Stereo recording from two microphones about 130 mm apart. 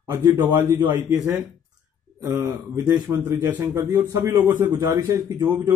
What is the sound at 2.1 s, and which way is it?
A man's voice, 25° right (ahead or behind).